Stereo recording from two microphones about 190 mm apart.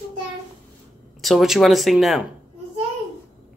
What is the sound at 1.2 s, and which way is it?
Speech, centre (ahead or behind).